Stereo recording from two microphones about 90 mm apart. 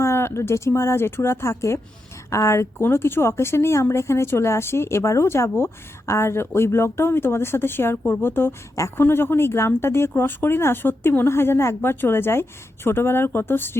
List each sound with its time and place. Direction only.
0.0 s speech: 30° left (ahead or behind)